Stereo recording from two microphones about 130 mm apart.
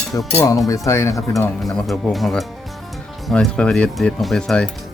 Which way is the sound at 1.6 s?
5° left (ahead or behind).